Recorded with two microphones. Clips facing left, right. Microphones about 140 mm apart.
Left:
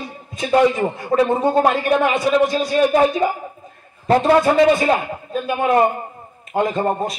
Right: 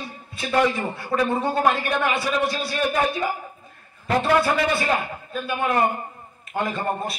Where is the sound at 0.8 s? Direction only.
20° left (ahead or behind).